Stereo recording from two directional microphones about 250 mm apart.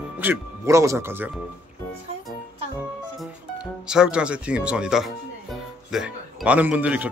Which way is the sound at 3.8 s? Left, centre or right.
Centre.